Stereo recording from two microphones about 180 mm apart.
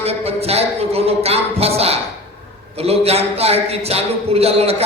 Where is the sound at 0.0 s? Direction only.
35° right (ahead or behind).